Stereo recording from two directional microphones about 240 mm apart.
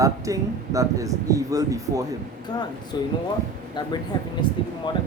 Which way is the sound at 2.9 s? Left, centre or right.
Centre.